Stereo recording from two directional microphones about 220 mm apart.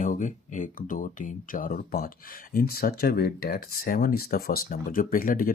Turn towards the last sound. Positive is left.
turn(degrees=40)  # may be behind; listen again after turning